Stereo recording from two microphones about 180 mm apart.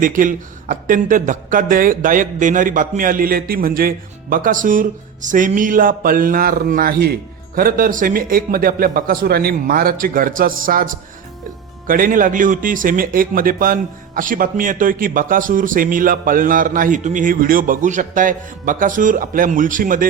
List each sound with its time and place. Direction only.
0.0 s speech: 45° right (ahead or behind)